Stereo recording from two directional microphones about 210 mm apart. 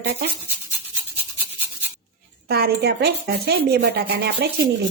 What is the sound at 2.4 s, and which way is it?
Speech, 50° right (ahead or behind).